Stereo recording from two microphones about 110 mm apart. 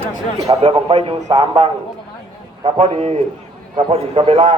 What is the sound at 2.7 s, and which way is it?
Speech, 80° right.